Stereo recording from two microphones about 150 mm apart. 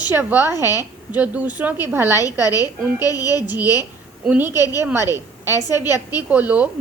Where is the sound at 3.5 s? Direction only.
15° right (ahead or behind).